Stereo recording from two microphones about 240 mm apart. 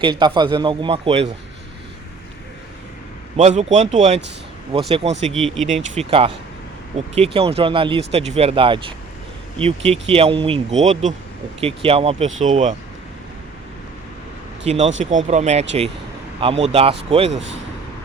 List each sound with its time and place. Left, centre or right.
0.0 s speech: centre
3.3 s speech: right
5.3 s speech: centre
5.9 s speech: right
14.6 s speech: right
17.3 s speech: right